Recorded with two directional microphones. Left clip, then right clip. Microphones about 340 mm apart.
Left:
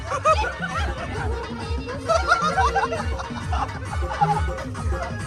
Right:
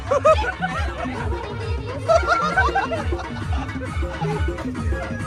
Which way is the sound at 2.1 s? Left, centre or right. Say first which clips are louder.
Right 2 dB; centre.